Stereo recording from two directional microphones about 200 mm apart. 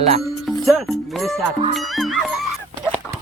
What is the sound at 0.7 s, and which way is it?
Music, centre (ahead or behind).